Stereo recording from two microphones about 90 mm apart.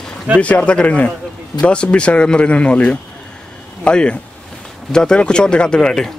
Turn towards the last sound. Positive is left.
turn(degrees=5)  # may be behind; listen again after turning